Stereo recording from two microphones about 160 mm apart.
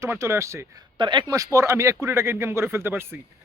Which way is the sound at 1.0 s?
30° right (ahead or behind).